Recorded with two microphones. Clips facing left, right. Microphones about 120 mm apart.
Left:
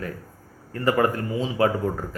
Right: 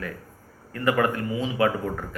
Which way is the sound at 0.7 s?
30° left (ahead or behind).